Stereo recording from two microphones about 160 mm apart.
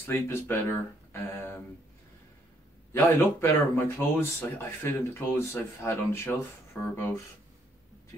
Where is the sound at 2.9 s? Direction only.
15° left (ahead or behind).